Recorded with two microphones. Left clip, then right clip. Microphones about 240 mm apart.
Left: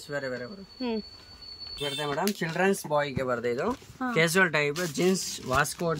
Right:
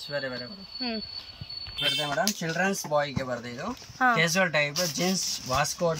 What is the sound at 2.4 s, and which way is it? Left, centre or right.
Speech, centre.